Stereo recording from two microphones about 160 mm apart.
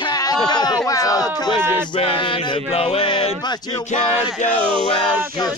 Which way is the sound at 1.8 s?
30° left (ahead or behind).